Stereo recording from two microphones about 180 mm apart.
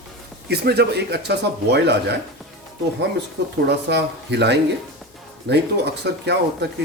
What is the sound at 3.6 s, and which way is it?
Speech, 70° right (ahead or behind).